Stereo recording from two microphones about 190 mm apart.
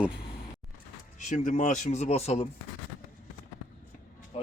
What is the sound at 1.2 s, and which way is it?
Speech, 40° left (ahead or behind).